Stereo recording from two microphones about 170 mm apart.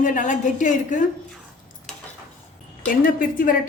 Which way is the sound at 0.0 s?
50° left (ahead or behind).